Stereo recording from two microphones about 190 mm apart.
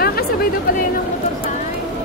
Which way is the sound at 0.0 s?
55° left (ahead or behind).